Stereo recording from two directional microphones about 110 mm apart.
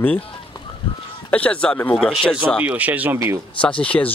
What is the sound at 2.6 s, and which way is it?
Speech, 15° right (ahead or behind).